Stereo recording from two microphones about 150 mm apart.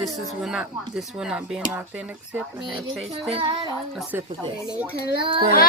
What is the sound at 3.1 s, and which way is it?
Speech, 40° right (ahead or behind).